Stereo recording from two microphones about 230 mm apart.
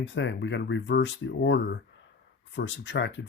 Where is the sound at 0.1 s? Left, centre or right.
Left.